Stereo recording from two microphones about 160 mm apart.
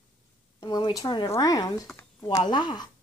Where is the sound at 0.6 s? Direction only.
25° left (ahead or behind).